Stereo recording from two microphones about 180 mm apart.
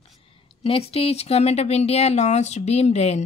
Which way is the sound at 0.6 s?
30° left (ahead or behind).